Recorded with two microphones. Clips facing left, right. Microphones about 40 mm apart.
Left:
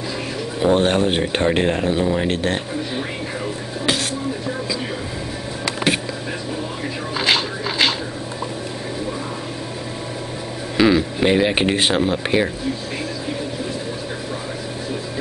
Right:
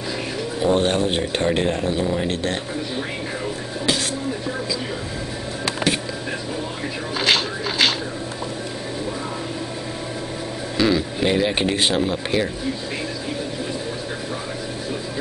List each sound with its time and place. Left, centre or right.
0.6 s speech: centre
7.2 s a sound: centre
10.8 s speech: centre